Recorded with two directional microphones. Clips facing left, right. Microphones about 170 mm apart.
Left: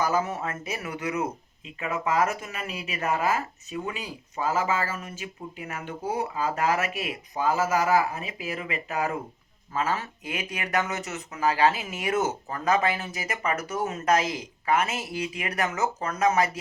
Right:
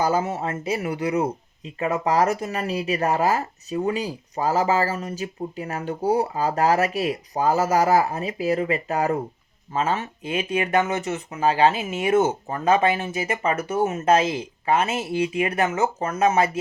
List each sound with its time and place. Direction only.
0.0 s speech: 30° right (ahead or behind)
9.7 s speech: 25° right (ahead or behind)